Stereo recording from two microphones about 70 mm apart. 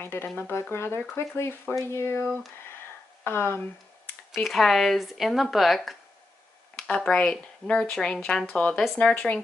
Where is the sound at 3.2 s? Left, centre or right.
Left.